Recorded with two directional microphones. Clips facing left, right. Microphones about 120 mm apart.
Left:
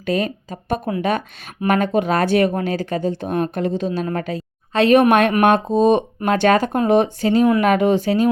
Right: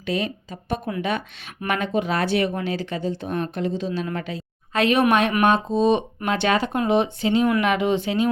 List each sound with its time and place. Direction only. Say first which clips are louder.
0.0 s speech: left 5 dB; 45° left (ahead or behind)
4.7 s a woman's voice: left 6 dB; 30° left (ahead or behind)
4.9 s speech: left 5 dB; 55° left (ahead or behind)